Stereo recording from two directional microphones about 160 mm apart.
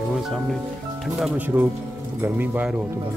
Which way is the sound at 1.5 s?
15° right (ahead or behind).